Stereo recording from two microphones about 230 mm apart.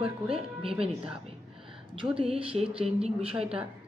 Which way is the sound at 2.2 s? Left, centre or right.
Right.